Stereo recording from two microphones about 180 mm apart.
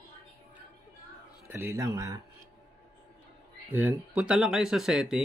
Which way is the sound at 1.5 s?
15° right (ahead or behind).